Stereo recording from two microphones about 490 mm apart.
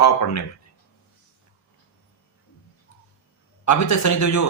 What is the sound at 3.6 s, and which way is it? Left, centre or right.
Speech, left.